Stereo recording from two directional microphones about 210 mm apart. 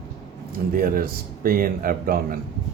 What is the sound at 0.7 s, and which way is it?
Speech, 45° right (ahead or behind).